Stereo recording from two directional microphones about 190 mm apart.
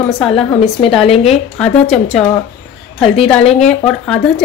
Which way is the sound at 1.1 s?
30° left (ahead or behind).